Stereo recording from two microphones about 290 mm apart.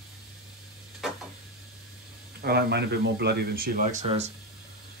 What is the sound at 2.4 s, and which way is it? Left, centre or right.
Speech, right.